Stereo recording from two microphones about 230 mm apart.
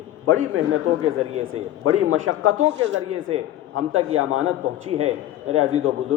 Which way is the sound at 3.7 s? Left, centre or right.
Right.